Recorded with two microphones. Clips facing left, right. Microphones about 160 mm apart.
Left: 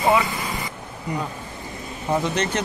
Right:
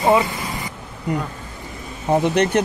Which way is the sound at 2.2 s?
60° right (ahead or behind).